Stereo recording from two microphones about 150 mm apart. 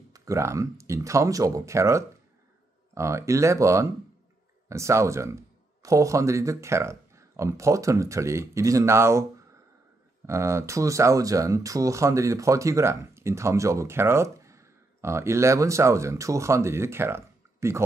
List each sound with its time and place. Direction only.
0.1 s speech: 20° right (ahead or behind)
10.2 s speech: 20° right (ahead or behind)